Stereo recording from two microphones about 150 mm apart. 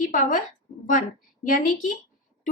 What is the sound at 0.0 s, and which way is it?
Speech, 60° left (ahead or behind).